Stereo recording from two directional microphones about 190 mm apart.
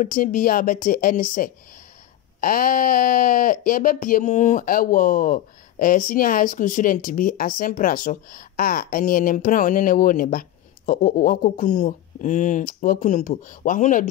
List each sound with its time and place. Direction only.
0.0 s speech: 45° left (ahead or behind)